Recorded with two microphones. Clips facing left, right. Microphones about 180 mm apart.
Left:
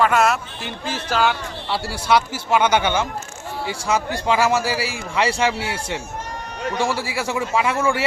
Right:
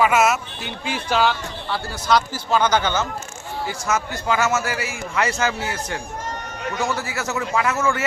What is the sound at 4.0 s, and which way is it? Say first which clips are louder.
A man's voice: left 4 dB; 30° left (ahead or behind).